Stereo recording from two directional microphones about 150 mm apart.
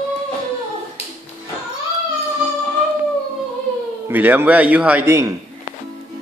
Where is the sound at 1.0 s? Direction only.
45° left (ahead or behind).